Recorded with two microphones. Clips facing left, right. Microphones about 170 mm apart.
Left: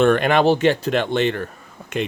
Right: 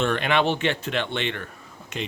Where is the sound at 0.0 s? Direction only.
50° left (ahead or behind).